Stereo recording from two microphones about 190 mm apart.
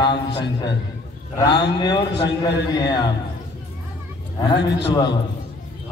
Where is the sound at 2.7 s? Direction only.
20° left (ahead or behind).